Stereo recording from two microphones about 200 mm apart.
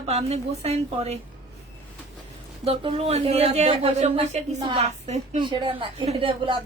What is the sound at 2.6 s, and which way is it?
A woman's voice, 30° right (ahead or behind).